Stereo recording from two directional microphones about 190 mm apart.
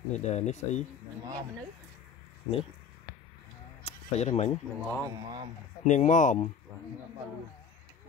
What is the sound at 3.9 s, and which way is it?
Bleat, 30° left (ahead or behind).